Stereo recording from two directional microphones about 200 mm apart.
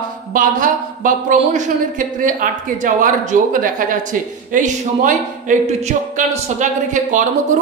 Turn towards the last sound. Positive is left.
turn(degrees=-40)  # may be behind; listen again after turning